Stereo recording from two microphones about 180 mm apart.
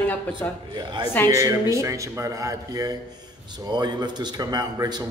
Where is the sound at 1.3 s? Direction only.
15° right (ahead or behind).